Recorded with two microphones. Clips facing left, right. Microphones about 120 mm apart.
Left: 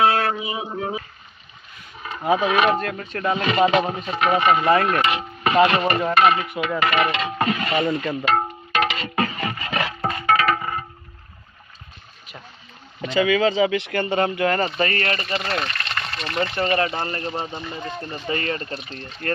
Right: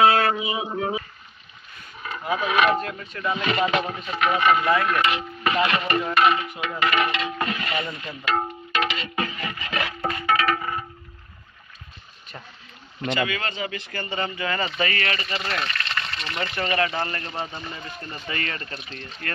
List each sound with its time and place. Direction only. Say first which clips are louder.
0.0 s a sound: right 1 dB; 90° right
2.0 s speech: left 6 dB; 25° left (ahead or behind)
2.8 s speech: left 4 dB; 70° left (ahead or behind); by 3.4 s 50° left (ahead or behind)
3.4 s speech: left 5 dB; 30° left (ahead or behind)
6.4 s speech: left 6 dB; 65° left (ahead or behind)
6.8 s speech: left 1 dB; 45° left (ahead or behind)
7.7 s speech: left 8 dB; 60° left (ahead or behind)
8.3 s music: left 1 dB; 45° left (ahead or behind)
9.7 s music: left 1 dB; 30° left (ahead or behind)
13.6 s speech: left 11 dB; 85° left; by 14.7 s 55° left (ahead or behind)
14.7 s speech: left 3 dB; 40° left (ahead or behind)
16.6 s speech: right 1 dB; 30° left (ahead or behind)